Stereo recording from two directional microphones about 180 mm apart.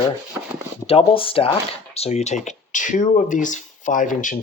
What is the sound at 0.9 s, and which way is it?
Speech, 30° left (ahead or behind).